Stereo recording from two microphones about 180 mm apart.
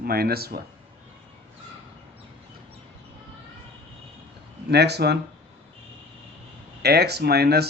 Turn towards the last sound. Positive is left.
turn(degrees=-60)  # may be behind; listen again after turning